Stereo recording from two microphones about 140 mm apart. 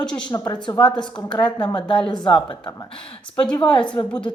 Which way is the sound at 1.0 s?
10° left (ahead or behind).